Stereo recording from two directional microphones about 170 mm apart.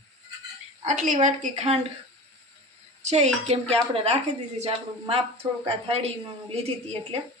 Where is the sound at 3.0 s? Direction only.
40° right (ahead or behind).